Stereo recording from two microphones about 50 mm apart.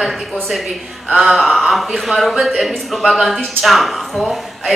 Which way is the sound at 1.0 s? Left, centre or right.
Centre.